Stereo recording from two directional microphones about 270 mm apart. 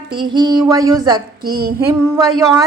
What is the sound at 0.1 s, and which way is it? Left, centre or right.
Female singing, centre.